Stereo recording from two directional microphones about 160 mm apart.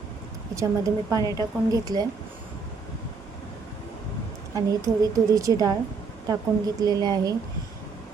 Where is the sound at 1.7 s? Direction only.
20° right (ahead or behind).